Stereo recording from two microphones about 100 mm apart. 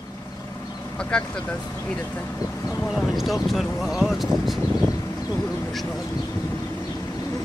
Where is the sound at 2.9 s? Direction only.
Centre (ahead or behind).